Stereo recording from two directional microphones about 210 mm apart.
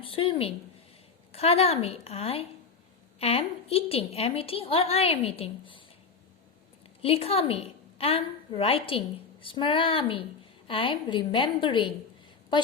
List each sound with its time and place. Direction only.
0.0 s a woman's voice: 25° left (ahead or behind)
7.0 s a woman's voice: 30° left (ahead or behind)